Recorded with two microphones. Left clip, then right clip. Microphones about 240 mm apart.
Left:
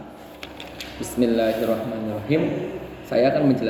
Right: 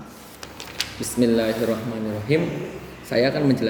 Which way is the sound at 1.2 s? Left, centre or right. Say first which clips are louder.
Right 1 dB; right.